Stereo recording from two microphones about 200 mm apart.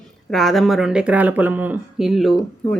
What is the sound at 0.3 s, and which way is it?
Speech, centre (ahead or behind).